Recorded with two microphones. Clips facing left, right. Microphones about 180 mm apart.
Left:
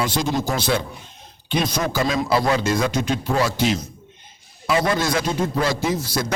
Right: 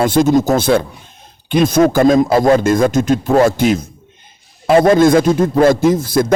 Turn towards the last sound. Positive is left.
turn(degrees=-50)  # may be behind; listen again after turning